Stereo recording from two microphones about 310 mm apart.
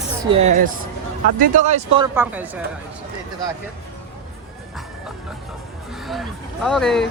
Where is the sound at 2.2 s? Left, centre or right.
Centre.